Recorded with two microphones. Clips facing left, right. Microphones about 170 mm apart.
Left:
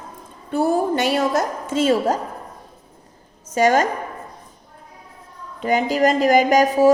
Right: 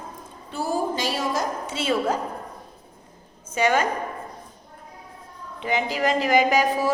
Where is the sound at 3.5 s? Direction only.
40° left (ahead or behind).